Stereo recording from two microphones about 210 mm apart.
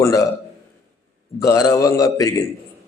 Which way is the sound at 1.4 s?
15° left (ahead or behind).